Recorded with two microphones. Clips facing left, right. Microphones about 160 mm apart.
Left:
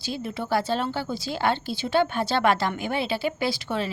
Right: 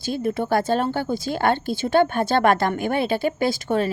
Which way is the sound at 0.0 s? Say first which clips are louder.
Right 7 dB; 50° right (ahead or behind).